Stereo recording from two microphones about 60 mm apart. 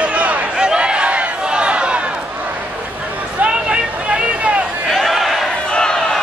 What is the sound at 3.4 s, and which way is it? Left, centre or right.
Vehicle, centre.